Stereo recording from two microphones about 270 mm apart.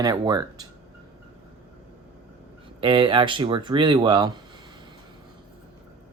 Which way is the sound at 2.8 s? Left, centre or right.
Centre.